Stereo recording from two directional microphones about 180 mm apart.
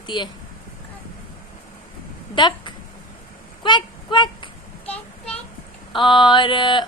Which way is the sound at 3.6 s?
25° left (ahead or behind).